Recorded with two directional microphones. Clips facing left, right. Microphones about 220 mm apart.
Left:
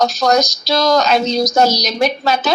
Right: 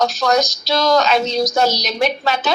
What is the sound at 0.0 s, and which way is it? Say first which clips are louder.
Speech: left 2 dB; 40° left (ahead or behind).